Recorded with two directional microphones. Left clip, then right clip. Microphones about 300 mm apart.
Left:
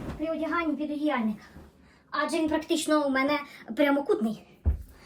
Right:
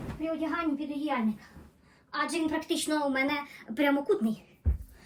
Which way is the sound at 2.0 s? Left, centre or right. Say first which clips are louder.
Left 3 dB; centre.